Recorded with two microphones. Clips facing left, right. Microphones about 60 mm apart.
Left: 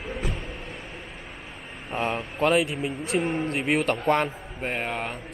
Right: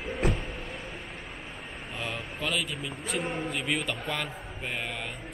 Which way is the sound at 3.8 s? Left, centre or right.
Left.